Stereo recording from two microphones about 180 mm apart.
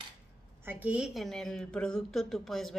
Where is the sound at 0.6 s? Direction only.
10° right (ahead or behind).